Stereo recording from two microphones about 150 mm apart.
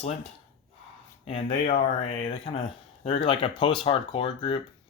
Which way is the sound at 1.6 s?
50° left (ahead or behind).